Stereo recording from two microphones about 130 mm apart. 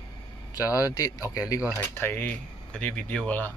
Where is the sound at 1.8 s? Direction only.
15° left (ahead or behind).